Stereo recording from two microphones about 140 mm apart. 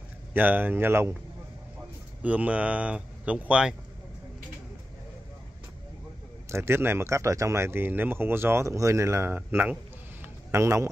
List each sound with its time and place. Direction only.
0.3 s speech: 15° right (ahead or behind)
2.2 s speech: 10° right (ahead or behind)
6.5 s speech: 15° right (ahead or behind)
10.2 s a sound: 20° right (ahead or behind)